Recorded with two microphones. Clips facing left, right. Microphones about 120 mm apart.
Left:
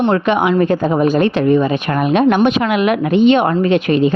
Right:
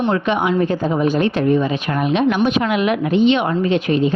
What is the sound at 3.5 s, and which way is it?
Speech, 65° left (ahead or behind).